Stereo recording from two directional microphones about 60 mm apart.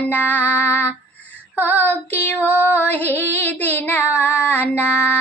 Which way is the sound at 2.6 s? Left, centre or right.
Left.